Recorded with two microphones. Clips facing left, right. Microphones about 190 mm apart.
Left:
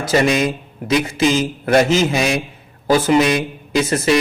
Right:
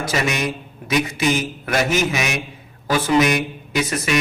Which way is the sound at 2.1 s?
30° left (ahead or behind).